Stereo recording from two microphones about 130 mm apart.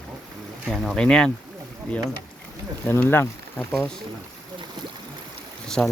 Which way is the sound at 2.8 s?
15° left (ahead or behind).